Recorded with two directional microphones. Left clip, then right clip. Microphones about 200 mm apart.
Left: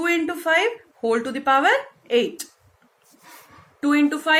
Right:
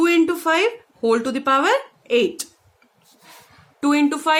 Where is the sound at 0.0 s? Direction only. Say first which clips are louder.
Right 5 dB; 55° right (ahead or behind).